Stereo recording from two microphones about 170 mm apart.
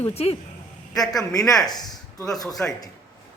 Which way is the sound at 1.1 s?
20° left (ahead or behind).